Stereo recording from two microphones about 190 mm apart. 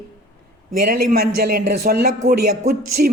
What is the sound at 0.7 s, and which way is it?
A man's voice, 50° right (ahead or behind).